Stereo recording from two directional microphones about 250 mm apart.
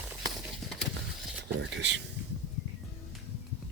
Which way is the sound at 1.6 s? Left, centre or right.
Right.